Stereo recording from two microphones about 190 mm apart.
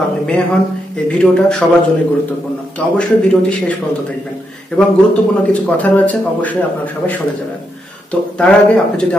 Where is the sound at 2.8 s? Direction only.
5° left (ahead or behind).